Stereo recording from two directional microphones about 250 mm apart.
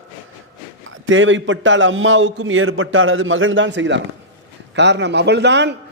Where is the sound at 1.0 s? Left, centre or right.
Right.